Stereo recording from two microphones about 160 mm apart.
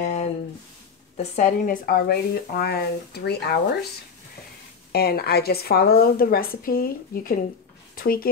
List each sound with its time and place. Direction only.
0.0 s a sound: 45° left (ahead or behind)
1.1 s speech: 45° left (ahead or behind); by 3.5 s 90° left
4.9 s a woman's voice: 75° left (ahead or behind)